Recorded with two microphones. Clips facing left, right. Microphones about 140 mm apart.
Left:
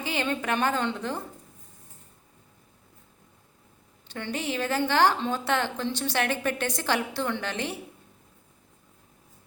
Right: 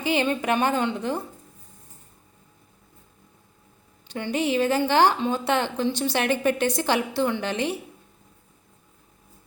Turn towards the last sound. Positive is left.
turn(degrees=-15)  # may be behind; listen again after turning